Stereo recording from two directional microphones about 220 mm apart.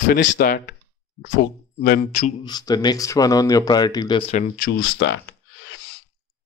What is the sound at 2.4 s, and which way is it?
Speech, 20° left (ahead or behind).